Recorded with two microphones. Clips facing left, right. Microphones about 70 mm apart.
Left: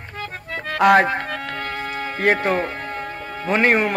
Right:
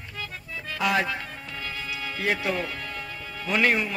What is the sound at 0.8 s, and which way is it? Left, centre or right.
Music, left.